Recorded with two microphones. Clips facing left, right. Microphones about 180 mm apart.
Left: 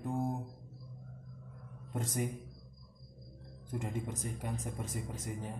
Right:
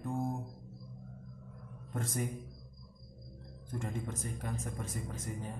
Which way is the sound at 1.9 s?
15° left (ahead or behind).